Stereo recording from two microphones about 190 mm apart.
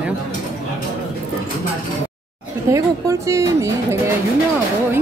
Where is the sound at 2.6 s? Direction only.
15° right (ahead or behind).